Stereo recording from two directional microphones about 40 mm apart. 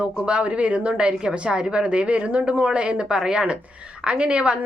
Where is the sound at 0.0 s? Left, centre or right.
Right.